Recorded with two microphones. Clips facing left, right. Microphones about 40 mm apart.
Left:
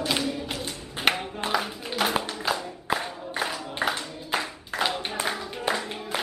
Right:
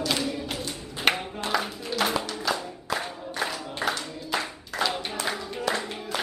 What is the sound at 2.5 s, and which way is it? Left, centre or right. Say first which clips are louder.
Music: left 1 dB; centre.